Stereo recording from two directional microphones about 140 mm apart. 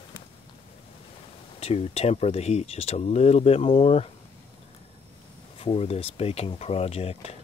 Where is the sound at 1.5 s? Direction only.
45° left (ahead or behind).